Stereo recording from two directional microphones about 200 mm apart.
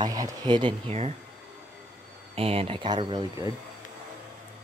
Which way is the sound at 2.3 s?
30° right (ahead or behind).